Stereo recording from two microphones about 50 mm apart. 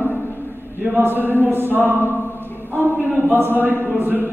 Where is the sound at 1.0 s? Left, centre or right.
Right.